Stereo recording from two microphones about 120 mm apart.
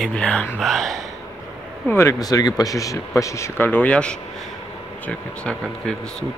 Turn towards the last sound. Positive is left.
turn(degrees=5)  # may be behind; listen again after turning